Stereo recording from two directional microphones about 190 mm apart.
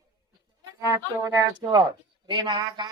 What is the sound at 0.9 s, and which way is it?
A woman's voice, 15° right (ahead or behind).